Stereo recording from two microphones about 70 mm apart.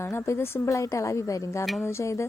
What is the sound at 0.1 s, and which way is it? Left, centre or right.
A woman's voice, left.